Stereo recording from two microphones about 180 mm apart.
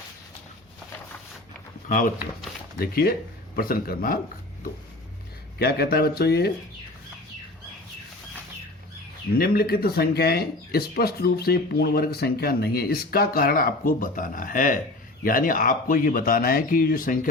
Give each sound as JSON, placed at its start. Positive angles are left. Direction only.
{"t": 1.9, "sound": "speech", "side_deg": 50}
{"t": 5.5, "sound": "speech", "side_deg": 60}
{"t": 9.4, "sound": "speech", "side_deg": 60}